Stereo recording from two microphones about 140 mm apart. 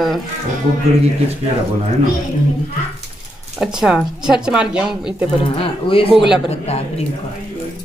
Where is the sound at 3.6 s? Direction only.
5° right (ahead or behind).